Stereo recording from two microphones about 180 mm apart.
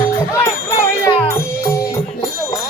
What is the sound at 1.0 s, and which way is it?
Music, 25° left (ahead or behind).